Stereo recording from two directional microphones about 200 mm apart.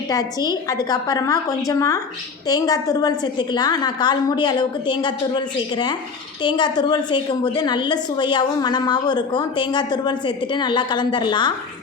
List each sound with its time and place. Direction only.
0.1 s a woman's voice: 20° left (ahead or behind)